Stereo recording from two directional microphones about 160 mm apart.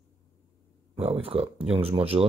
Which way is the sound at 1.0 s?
35° right (ahead or behind).